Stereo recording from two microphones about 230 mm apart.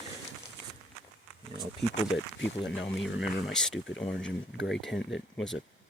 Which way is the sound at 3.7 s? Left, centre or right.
Left.